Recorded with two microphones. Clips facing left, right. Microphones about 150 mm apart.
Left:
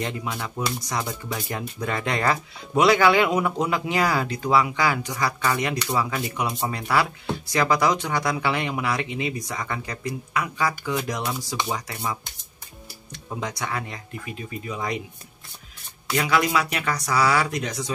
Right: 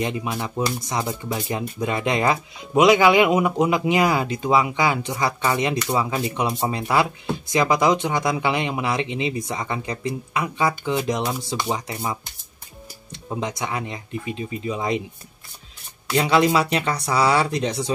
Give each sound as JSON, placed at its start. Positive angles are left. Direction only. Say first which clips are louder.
{"t": 0.0, "sound": "speech", "louder": "right 4 dB", "side_deg": -20}
{"t": 16.2, "sound": "speech", "louder": "right 4 dB", "side_deg": -30}